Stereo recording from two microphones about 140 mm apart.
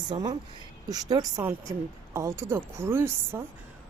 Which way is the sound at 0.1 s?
25° right (ahead or behind).